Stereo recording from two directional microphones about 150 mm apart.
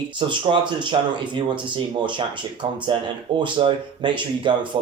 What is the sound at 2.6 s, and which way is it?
Speech, 35° right (ahead or behind).